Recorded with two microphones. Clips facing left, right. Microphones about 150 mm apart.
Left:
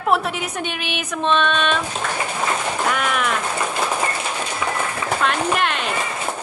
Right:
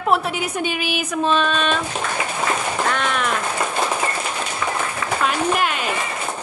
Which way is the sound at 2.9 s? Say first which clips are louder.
Left 2 dB; 5° left (ahead or behind).